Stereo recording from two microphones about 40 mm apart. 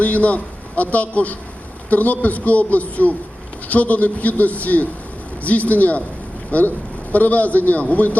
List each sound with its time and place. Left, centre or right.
0.0 s a man's voice: left